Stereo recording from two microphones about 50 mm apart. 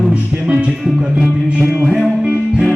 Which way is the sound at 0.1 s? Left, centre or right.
Right.